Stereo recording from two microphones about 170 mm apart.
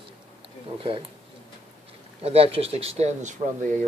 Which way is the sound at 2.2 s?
35° right (ahead or behind).